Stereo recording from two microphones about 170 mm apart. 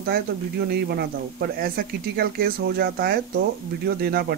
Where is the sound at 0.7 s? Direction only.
70° right (ahead or behind).